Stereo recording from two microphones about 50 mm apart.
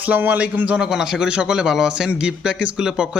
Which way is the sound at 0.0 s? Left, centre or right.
Right.